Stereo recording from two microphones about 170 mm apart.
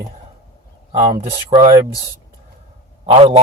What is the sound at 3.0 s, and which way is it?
Speech, 30° right (ahead or behind).